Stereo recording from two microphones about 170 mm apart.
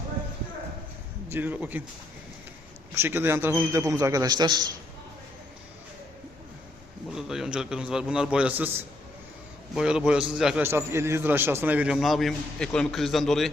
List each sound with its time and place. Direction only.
1.3 s a man's voice: 10° right (ahead or behind)
2.9 s a man's voice: 15° right (ahead or behind)
7.1 s a man's voice: 5° right (ahead or behind)
10.6 s a man's voice: 15° right (ahead or behind); by 13.5 s centre (ahead or behind)